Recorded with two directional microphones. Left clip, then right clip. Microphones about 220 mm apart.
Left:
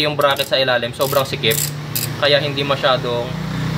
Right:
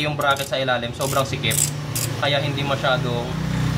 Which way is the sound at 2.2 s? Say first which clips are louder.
Left 7 dB; 55° left (ahead or behind).